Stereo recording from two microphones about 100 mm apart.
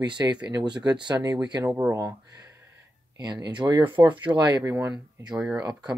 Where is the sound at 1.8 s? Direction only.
30° right (ahead or behind); by 4.6 s 50° right (ahead or behind).